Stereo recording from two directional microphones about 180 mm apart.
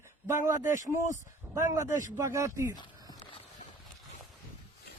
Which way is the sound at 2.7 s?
20° left (ahead or behind).